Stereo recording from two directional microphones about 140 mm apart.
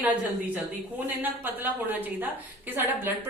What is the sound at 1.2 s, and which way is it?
Speech, 15° right (ahead or behind).